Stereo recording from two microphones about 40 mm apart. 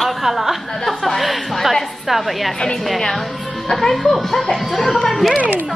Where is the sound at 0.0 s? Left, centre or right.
Centre.